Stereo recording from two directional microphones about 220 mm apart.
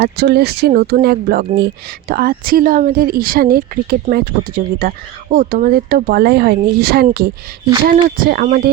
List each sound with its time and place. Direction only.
0.0 s a woman's voice: 45° right (ahead or behind)